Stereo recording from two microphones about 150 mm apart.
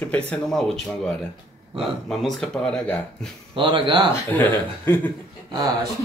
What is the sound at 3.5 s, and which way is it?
Speech, 35° right (ahead or behind).